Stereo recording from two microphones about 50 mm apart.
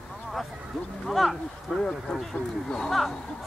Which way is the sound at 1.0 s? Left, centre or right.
Centre.